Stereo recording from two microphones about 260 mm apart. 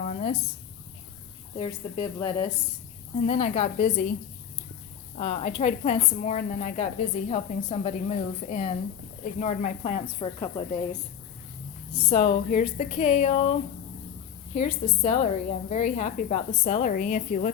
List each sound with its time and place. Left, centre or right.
0.0 s a sound: left
1.5 s a woman's voice: left
5.1 s a woman's voice: left
12.0 s a woman's voice: left
14.5 s a woman's voice: left